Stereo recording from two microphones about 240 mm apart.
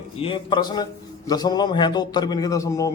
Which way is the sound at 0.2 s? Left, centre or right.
Left.